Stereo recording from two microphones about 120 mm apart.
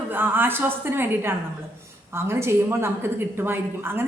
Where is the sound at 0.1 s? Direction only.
15° right (ahead or behind).